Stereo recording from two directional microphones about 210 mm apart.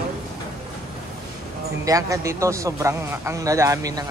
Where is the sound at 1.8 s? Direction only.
15° right (ahead or behind).